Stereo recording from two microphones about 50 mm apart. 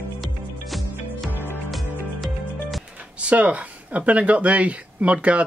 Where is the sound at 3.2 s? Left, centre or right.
Right.